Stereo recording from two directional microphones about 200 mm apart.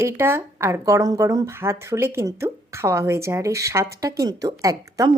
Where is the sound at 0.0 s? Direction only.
10° right (ahead or behind).